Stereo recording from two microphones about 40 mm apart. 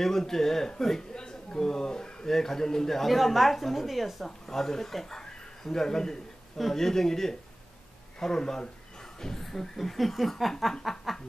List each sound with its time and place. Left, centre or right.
0.0 s a man's voice: centre
4.5 s a man's voice: centre
9.2 s chuckle: centre